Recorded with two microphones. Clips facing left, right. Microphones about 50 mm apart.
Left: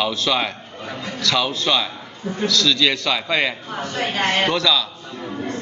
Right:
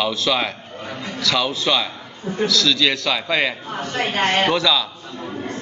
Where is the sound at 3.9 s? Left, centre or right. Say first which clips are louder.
Right 2 dB; right.